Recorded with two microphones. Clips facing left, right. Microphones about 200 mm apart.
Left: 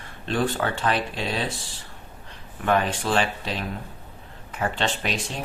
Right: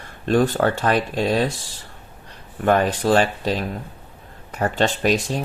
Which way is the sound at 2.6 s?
40° right (ahead or behind).